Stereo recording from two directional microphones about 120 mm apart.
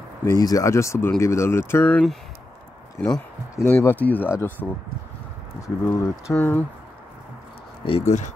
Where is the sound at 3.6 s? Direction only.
20° left (ahead or behind).